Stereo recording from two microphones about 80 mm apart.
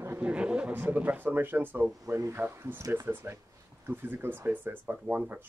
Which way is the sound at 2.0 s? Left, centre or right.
Right.